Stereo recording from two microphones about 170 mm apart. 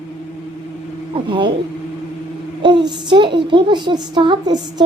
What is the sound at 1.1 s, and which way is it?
Speech, 30° right (ahead or behind).